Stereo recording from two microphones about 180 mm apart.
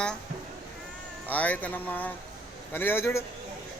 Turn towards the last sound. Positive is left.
turn(degrees=15)  # may be behind; listen again after turning